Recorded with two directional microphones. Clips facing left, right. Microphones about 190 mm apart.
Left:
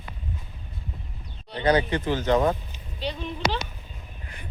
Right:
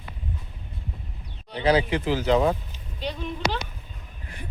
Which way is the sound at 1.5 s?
10° right (ahead or behind).